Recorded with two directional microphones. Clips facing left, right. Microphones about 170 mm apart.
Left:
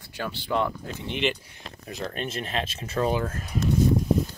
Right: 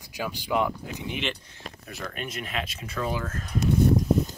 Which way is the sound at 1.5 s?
20° left (ahead or behind).